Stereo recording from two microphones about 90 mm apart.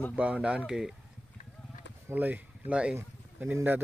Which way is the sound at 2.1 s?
20° right (ahead or behind).